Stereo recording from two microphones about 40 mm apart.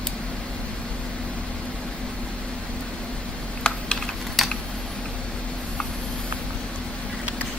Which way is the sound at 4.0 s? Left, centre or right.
Centre.